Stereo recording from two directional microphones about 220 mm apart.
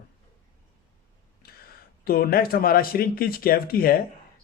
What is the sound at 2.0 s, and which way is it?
Speech, 45° left (ahead or behind).